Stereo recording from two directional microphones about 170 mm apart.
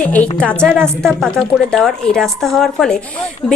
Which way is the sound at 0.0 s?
10° left (ahead or behind).